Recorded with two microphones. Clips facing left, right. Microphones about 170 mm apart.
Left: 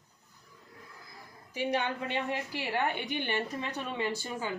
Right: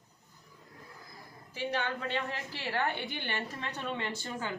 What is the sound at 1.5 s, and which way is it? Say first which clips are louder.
A woman's voice: left 3 dB; 15° left (ahead or behind).